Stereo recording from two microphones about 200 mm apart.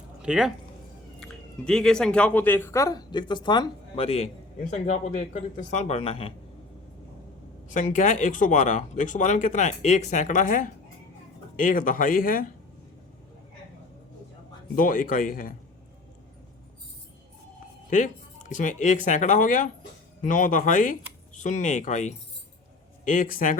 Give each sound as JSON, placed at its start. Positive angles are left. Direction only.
{"t": 0.2, "sound": "speech", "side_deg": -5}
{"t": 7.7, "sound": "speech", "side_deg": 40}
{"t": 14.8, "sound": "speech", "side_deg": 45}
{"t": 17.8, "sound": "speech", "side_deg": 40}